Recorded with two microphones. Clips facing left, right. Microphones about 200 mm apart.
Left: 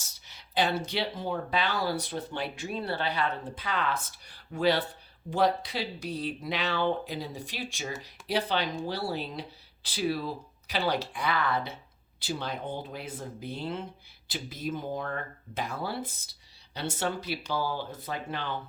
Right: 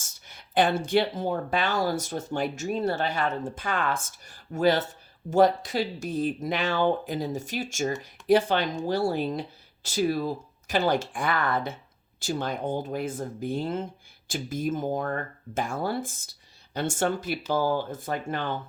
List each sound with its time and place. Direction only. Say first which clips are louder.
0.0 s speech: right 3 dB; 50° right (ahead or behind)